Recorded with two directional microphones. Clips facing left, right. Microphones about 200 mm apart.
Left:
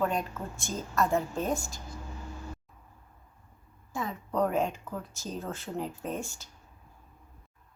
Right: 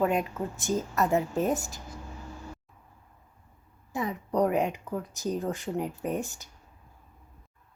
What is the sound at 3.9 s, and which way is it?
Speech, 20° right (ahead or behind).